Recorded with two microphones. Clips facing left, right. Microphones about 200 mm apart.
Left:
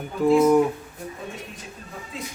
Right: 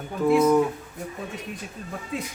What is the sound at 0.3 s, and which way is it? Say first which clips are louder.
Speech: left 2 dB; 20° left (ahead or behind).